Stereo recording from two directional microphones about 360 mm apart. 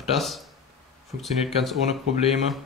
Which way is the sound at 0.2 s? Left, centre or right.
Centre.